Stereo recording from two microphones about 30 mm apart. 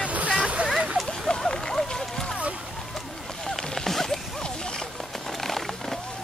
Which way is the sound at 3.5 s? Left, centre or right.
Centre.